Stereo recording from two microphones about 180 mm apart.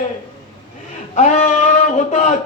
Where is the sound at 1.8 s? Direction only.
40° left (ahead or behind).